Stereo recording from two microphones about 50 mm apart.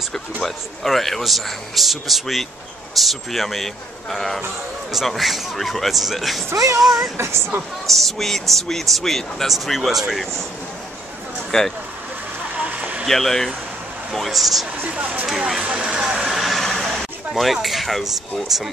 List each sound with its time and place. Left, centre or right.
0.4 s speech: centre
7.2 s speech: right
7.8 s speech: centre
11.5 s speech: centre
12.7 s a sound: right
13.0 s speech: centre
14.9 s speech: right
15.2 s speech: centre
15.6 s speech: right
16.3 s vehicle: centre
17.3 s speech: centre